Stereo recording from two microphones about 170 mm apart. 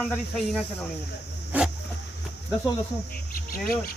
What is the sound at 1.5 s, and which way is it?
Dog, 10° right (ahead or behind).